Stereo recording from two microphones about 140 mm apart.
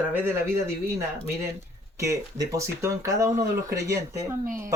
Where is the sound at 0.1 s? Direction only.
15° right (ahead or behind).